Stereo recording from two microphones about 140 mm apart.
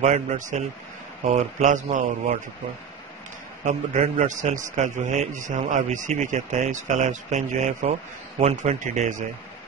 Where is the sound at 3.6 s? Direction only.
60° right (ahead or behind).